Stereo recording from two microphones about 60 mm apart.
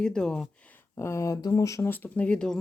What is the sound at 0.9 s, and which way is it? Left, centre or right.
Speech, left.